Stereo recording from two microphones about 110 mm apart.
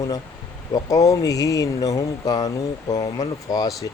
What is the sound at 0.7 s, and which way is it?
A man's voice, 30° left (ahead or behind).